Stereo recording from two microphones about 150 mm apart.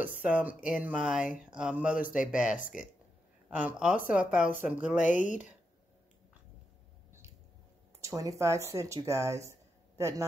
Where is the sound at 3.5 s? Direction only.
10° right (ahead or behind).